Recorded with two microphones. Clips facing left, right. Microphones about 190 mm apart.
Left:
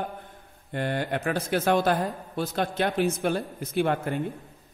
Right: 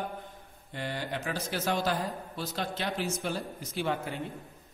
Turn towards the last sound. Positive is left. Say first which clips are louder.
# left 7 dB
turn(degrees=55)  # may be behind; listen again after turning